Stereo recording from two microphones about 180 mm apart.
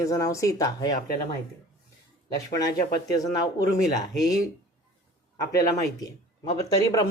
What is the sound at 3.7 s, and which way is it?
Speech, 20° left (ahead or behind).